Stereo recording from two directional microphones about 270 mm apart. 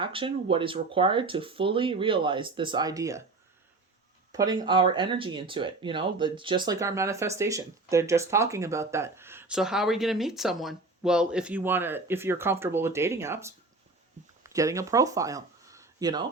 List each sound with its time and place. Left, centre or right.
0.0 s speech: centre
4.3 s speech: centre